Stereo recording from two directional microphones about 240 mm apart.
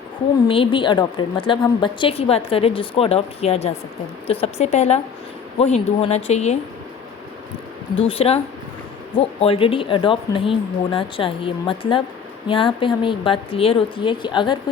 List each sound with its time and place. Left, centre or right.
0.4 s speech: left
8.0 s speech: left